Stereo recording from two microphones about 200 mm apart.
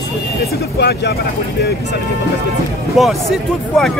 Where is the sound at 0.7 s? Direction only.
55° left (ahead or behind).